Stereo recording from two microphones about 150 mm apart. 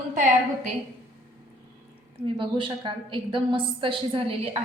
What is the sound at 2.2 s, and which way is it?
A woman's voice, 35° right (ahead or behind).